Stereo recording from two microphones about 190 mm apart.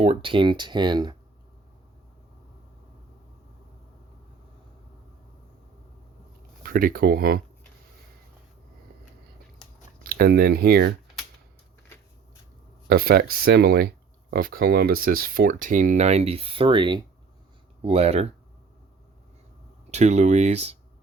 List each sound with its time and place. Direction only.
0.0 s speech: 30° right (ahead or behind)
6.6 s speech: 50° right (ahead or behind)
10.0 s speech: 50° right (ahead or behind)
12.9 s speech: 50° right (ahead or behind); by 18.3 s 35° right (ahead or behind)
19.9 s speech: 35° right (ahead or behind)